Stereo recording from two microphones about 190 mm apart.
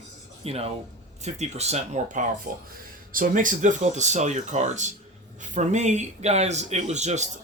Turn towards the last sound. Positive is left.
turn(degrees=-35)  # may be behind; listen again after turning